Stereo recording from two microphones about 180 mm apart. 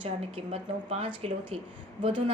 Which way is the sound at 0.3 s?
35° right (ahead or behind).